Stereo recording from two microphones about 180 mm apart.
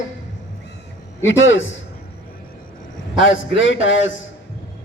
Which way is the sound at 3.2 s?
90° left.